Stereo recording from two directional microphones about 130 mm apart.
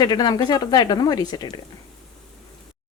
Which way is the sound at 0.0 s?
30° left (ahead or behind).